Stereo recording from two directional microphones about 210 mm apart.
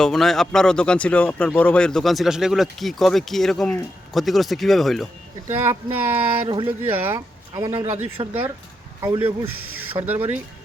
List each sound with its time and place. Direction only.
0.0 s speech: centre (ahead or behind)
5.5 s speech: 10° right (ahead or behind)
9.0 s a man's voice: 20° right (ahead or behind)
10.0 s speech: 10° right (ahead or behind)